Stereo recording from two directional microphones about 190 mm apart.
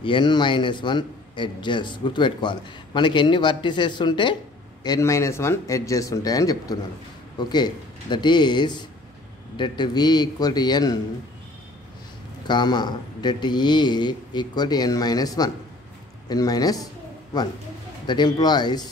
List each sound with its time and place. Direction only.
0.0 s a man's voice: 25° left (ahead or behind)
12.4 s a man's voice: 20° left (ahead or behind)